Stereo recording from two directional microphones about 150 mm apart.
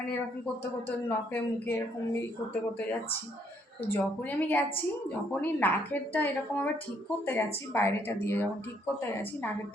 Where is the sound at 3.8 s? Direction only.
15° left (ahead or behind).